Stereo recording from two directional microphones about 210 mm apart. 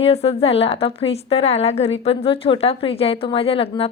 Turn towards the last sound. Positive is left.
turn(degrees=25)  # may be behind; listen again after turning